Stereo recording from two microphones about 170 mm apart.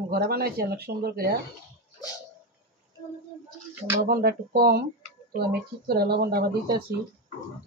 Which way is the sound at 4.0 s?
65° right (ahead or behind).